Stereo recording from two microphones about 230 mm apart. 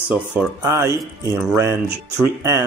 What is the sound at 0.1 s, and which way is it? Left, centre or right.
Speech, centre.